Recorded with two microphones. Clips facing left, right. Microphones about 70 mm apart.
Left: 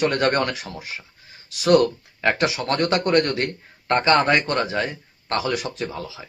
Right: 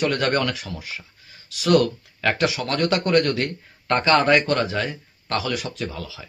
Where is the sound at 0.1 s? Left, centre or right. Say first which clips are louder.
Left 1 dB; left.